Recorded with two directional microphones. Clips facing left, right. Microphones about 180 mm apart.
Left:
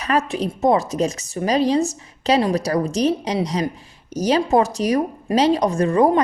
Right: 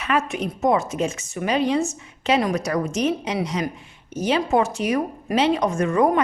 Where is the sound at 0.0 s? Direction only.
35° left (ahead or behind).